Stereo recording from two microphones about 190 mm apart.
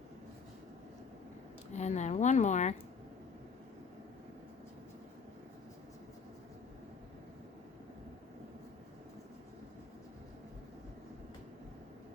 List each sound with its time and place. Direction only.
1.7 s speech: 35° left (ahead or behind)